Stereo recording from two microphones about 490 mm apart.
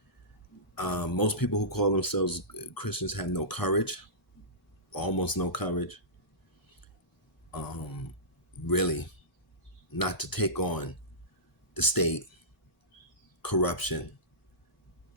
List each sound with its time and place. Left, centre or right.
0.8 s speech: left
7.5 s speech: left
13.4 s speech: left